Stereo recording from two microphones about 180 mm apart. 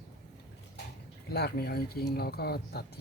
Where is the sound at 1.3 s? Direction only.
60° left (ahead or behind).